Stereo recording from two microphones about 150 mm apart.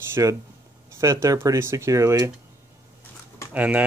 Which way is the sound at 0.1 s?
20° right (ahead or behind).